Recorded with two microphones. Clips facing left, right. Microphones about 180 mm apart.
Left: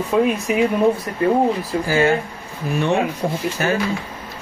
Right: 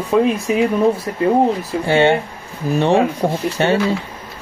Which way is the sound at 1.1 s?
25° right (ahead or behind).